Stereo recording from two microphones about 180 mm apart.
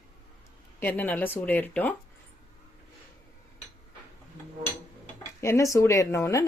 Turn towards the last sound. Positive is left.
turn(degrees=15)  # may be behind; listen again after turning